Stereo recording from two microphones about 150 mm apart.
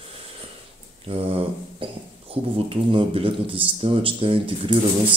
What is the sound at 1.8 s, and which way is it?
Speech, 35° right (ahead or behind).